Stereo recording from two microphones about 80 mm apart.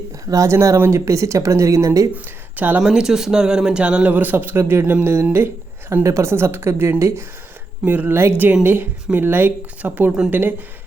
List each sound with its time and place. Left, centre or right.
0.3 s speech: right
2.1 s speech: right
2.8 s speech: centre; by 10.5 s right